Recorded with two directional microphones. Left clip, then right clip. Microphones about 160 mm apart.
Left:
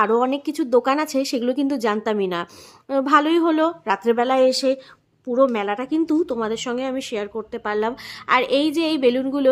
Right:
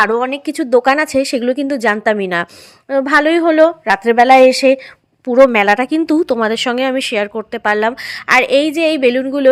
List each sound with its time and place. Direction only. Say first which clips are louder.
0.0 s a woman's voice: right 5 dB; 20° right (ahead or behind)
5.3 s speech: right 10 dB; 35° right (ahead or behind); by 9.5 s 15° right (ahead or behind)